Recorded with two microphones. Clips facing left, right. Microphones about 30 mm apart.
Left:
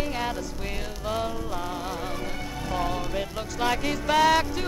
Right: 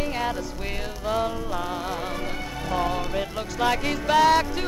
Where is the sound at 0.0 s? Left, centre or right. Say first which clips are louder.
Right 2 dB; centre.